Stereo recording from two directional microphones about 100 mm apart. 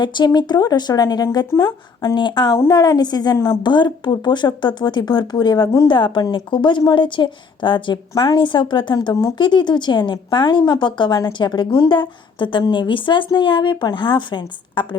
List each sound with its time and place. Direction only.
0.0 s a woman's voice: 50° left (ahead or behind)
2.6 s a woman's voice: 40° left (ahead or behind)
3.3 s speech: 30° left (ahead or behind)
3.6 s a woman's voice: 50° left (ahead or behind)
8.1 s a woman's voice: 40° left (ahead or behind)
8.4 s a woman's voice: 50° left (ahead or behind)
12.9 s a woman's voice: 55° left (ahead or behind)